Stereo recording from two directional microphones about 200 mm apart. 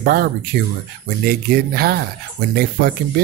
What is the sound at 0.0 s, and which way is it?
Speech, 50° right (ahead or behind).